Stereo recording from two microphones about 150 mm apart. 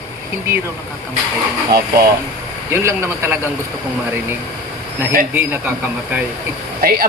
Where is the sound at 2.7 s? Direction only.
15° right (ahead or behind).